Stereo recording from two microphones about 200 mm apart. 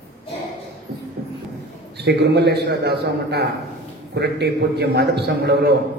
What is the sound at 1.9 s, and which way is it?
A man's voice, 55° right (ahead or behind).